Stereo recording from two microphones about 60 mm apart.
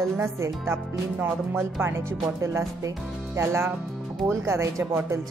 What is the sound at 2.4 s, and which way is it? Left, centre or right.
Speech, right.